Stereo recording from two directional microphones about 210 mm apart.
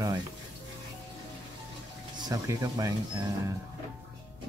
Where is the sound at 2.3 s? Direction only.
15° right (ahead or behind).